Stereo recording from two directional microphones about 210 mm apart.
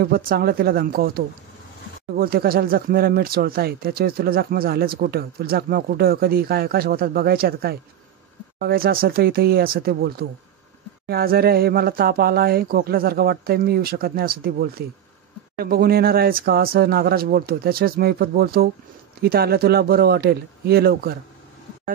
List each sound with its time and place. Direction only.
0.0 s speech: 45° right (ahead or behind)